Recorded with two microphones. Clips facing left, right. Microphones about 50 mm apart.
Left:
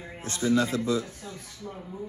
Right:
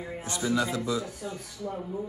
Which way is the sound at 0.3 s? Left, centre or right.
Right.